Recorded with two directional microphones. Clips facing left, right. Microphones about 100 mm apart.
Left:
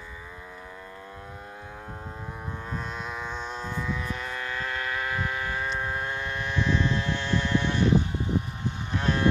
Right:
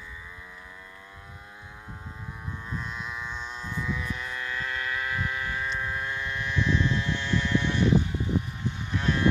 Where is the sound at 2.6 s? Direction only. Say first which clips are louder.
Left 1 dB; 45° left (ahead or behind).